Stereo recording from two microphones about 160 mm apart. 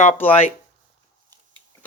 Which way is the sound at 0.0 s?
50° left (ahead or behind).